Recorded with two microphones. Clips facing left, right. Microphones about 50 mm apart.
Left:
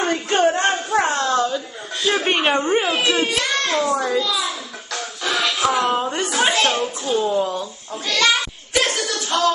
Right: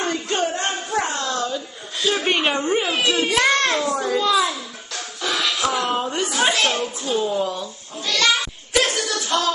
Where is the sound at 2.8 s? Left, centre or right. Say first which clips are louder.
Left 1 dB; centre.